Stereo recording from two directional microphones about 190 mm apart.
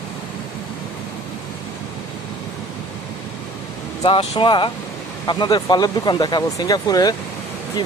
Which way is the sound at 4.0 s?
25° left (ahead or behind).